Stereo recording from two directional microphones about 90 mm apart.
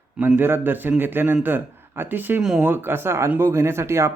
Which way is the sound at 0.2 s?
20° right (ahead or behind).